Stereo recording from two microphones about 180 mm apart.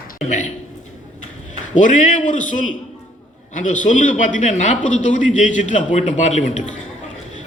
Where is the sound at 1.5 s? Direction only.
45° left (ahead or behind).